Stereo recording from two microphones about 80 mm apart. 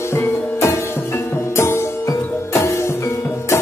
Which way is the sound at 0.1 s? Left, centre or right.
Left.